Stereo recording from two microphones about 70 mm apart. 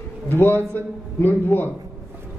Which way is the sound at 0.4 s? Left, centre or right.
Left.